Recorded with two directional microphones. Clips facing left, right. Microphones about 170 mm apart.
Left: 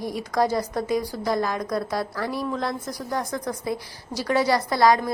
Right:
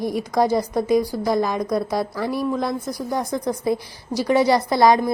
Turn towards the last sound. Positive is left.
turn(degrees=-20)  # may be behind; listen again after turning